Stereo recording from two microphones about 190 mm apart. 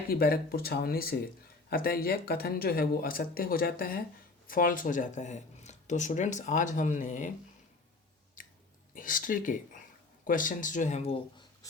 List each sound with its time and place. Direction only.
0.1 s speech: 50° left (ahead or behind)
8.4 s chewing: 45° left (ahead or behind)
9.0 s speech: 45° left (ahead or behind); by 11.4 s 30° left (ahead or behind)